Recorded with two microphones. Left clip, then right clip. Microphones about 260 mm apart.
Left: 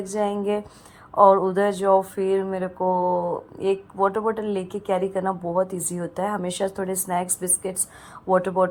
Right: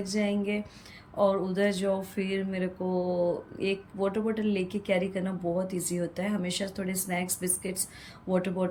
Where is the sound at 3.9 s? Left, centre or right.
Left.